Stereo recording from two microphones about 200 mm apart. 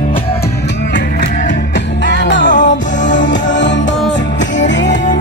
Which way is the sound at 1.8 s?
65° left (ahead or behind).